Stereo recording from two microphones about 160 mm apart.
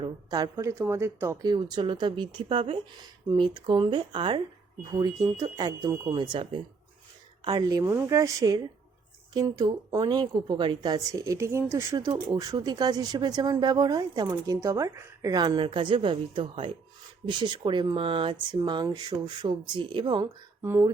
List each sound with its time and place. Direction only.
0.0 s a woman's voice: 25° right (ahead or behind)
11.9 s speech: 25° right (ahead or behind)
20.6 s speech: 15° right (ahead or behind)